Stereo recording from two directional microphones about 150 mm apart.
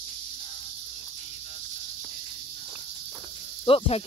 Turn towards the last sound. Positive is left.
turn(degrees=35)  # may be behind; listen again after turning